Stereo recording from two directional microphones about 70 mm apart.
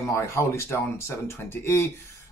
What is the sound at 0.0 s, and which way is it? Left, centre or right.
Speech, left.